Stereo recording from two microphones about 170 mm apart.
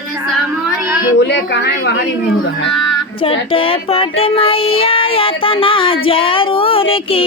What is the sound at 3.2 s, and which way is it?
Child singing, 30° left (ahead or behind).